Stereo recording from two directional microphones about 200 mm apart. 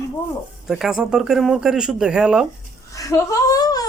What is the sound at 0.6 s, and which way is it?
Speech, centre (ahead or behind).